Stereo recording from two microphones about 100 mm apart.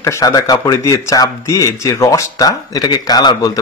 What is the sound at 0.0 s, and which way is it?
Speech, 40° left (ahead or behind).